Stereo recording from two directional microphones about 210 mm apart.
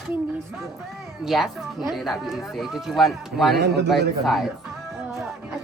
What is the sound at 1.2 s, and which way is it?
A woman's voice, centre (ahead or behind).